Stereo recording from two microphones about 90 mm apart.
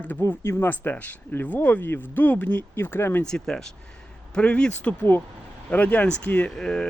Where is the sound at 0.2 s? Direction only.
25° left (ahead or behind).